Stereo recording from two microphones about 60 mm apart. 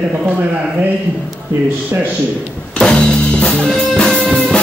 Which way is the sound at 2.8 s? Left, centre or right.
Centre.